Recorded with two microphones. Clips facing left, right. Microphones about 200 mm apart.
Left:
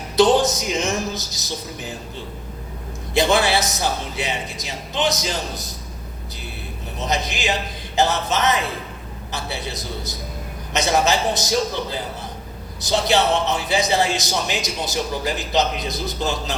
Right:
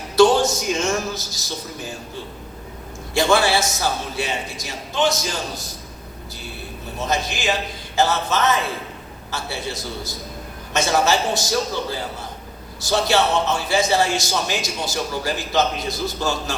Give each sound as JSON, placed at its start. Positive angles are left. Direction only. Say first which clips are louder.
{"t": 0.2, "sound": "a man's voice", "louder": "right 1 dB", "side_deg": 20}
{"t": 3.2, "sound": "a man's voice", "louder": "even", "side_deg": 20}
{"t": 7.0, "sound": "a man's voice", "louder": "right 1 dB", "side_deg": 20}